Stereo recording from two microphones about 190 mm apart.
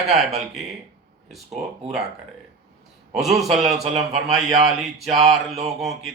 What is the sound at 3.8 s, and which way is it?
Speech, 35° right (ahead or behind).